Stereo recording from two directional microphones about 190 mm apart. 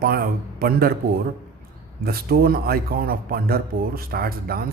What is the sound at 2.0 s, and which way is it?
Speech, 50° right (ahead or behind).